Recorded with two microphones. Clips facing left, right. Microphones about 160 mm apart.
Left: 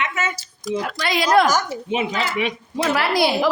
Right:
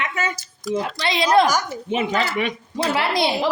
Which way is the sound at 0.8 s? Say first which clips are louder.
Even; 25° right (ahead or behind).